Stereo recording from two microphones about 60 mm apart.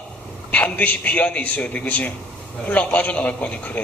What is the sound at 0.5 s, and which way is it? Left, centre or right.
A man's voice, left.